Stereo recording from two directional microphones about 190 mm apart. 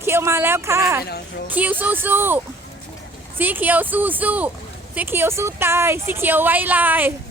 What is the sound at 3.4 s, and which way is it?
A woman's voice, 10° right (ahead or behind).